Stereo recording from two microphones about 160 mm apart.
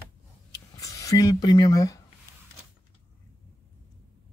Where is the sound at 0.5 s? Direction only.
20° left (ahead or behind).